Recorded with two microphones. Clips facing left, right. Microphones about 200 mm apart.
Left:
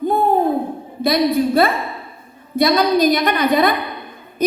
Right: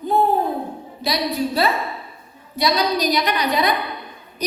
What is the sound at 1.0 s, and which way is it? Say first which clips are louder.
A woman's voice: left 7 dB; 50° left (ahead or behind).